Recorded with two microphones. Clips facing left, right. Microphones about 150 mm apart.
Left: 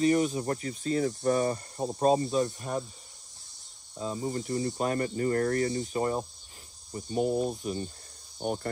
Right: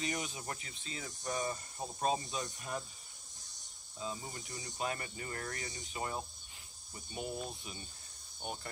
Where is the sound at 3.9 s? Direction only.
40° left (ahead or behind).